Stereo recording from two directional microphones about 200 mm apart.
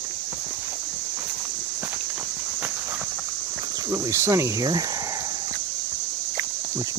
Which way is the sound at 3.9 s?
15° right (ahead or behind).